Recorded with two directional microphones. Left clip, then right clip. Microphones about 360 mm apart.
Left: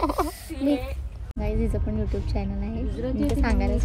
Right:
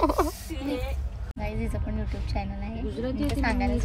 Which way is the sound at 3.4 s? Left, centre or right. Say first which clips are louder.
Even; centre.